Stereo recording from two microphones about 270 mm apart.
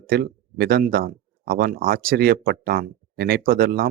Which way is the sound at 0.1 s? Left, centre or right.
Right.